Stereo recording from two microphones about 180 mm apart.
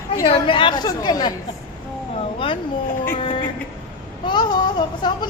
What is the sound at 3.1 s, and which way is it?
Speech, 30° left (ahead or behind).